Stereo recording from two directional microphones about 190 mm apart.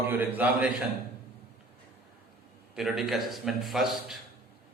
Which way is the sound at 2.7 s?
Centre (ahead or behind).